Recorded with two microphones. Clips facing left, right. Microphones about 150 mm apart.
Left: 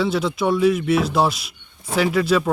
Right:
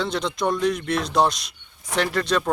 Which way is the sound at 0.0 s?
5° left (ahead or behind).